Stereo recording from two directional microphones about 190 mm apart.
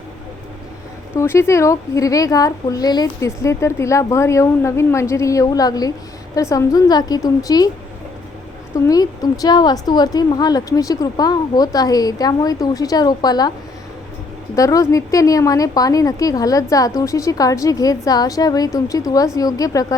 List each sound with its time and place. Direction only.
1.1 s a woman's voice: 15° left (ahead or behind)
8.7 s a woman's voice: 20° left (ahead or behind)
14.5 s a woman's voice: 15° left (ahead or behind)